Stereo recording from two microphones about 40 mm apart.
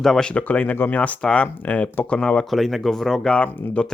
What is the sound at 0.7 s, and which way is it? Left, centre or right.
Speech, left.